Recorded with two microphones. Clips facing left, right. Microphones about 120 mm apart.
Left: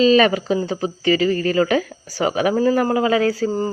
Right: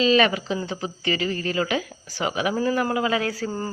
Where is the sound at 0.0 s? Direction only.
40° left (ahead or behind).